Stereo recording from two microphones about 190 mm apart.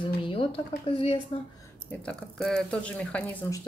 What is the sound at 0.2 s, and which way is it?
Speech, 30° left (ahead or behind).